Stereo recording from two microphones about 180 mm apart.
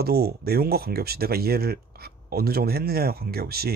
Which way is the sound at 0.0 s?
60° right (ahead or behind).